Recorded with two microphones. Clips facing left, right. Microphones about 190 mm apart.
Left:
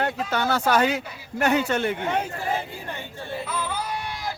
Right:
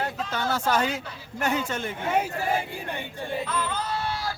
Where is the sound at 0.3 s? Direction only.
70° left (ahead or behind).